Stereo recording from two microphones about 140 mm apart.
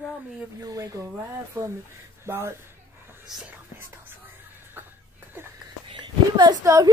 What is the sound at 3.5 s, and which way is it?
Whispering, 15° right (ahead or behind).